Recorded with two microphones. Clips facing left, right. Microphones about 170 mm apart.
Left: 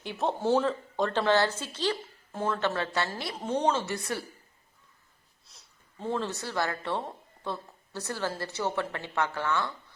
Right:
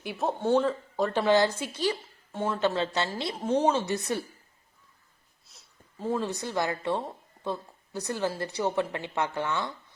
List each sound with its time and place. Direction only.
0.0 s a woman's voice: 5° right (ahead or behind)
2.6 s a woman's voice: 20° right (ahead or behind)
3.3 s a woman's voice: 10° right (ahead or behind)
5.5 s a woman's voice: centre (ahead or behind); by 9.7 s 20° right (ahead or behind)